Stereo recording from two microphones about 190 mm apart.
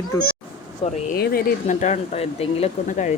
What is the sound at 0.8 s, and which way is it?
Speech, 30° left (ahead or behind).